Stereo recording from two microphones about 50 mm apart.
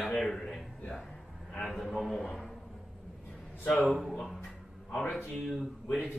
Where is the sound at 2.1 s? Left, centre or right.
Centre.